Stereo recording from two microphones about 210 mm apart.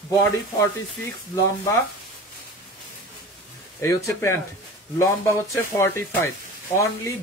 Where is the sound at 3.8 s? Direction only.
15° left (ahead or behind).